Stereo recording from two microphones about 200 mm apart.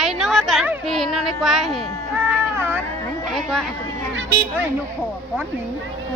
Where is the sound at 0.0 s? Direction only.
Centre (ahead or behind).